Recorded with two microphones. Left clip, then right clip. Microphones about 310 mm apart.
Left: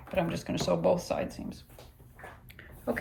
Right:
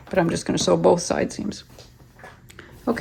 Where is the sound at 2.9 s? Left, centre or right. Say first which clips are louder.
Right 8 dB; centre.